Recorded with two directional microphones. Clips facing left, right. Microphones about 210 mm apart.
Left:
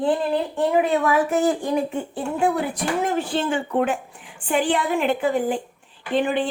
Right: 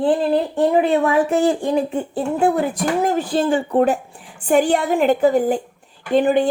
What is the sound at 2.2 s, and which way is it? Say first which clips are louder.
A woman's voice: right 4 dB; 40° right (ahead or behind).